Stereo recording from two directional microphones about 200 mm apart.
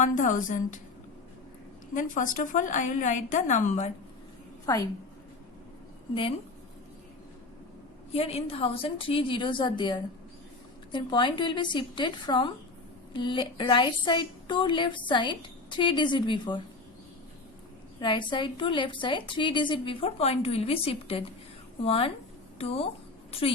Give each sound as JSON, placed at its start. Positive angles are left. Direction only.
{"t": 0.0, "sound": "a woman's voice", "side_deg": 40}
{"t": 2.0, "sound": "a woman's voice", "side_deg": 40}
{"t": 8.1, "sound": "a woman's voice", "side_deg": 30}
{"t": 18.0, "sound": "a woman's voice", "side_deg": 25}